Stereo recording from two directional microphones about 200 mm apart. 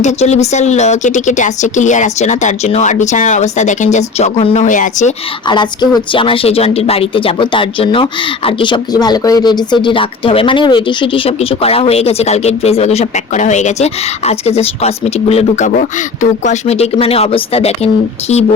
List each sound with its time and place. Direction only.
0.0 s speech: 35° left (ahead or behind)
5.5 s a woman's voice: 20° left (ahead or behind)